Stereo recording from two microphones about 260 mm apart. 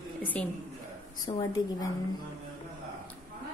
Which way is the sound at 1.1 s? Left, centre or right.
Centre.